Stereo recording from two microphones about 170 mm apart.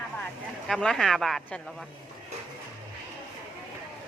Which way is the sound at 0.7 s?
5° left (ahead or behind).